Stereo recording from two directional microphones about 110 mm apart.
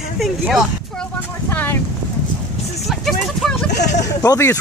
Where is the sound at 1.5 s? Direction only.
15° left (ahead or behind).